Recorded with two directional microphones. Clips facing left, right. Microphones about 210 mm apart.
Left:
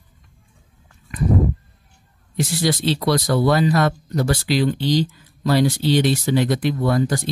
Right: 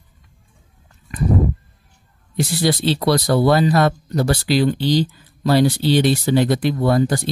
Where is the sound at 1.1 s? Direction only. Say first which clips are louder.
Right 1 dB; 35° right (ahead or behind).